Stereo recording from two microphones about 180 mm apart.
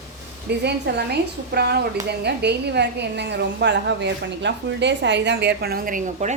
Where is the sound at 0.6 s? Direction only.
65° right (ahead or behind).